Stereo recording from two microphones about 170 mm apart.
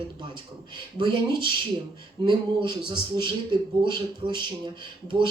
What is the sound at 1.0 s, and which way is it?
Speech, 30° right (ahead or behind).